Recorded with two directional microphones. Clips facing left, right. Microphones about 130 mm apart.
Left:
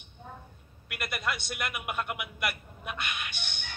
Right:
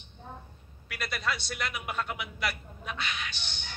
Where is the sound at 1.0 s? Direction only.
10° left (ahead or behind).